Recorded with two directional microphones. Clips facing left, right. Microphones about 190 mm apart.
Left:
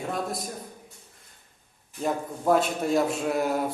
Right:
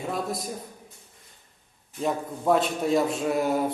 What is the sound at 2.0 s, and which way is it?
Speech, centre (ahead or behind).